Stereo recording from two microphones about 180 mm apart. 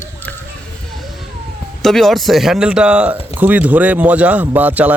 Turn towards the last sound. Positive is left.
turn(degrees=-10)  # may be behind; listen again after turning